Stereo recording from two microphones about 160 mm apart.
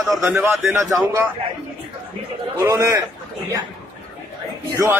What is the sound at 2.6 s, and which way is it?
Speech, 15° right (ahead or behind).